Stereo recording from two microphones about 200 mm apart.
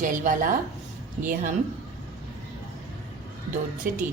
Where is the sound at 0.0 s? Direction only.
40° right (ahead or behind).